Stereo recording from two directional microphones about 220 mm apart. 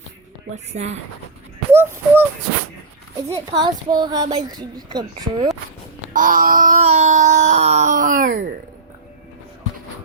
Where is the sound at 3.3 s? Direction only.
15° right (ahead or behind).